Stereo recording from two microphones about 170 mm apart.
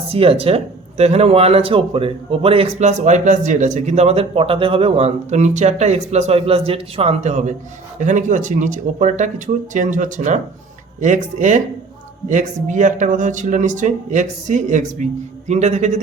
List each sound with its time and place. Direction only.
0.1 s speech: 35° right (ahead or behind)